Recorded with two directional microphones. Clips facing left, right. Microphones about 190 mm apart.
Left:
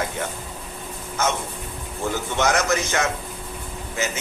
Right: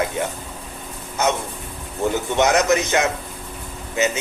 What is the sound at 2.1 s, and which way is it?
Speech, 20° right (ahead or behind).